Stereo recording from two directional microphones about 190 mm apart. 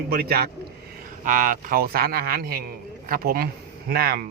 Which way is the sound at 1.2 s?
45° right (ahead or behind).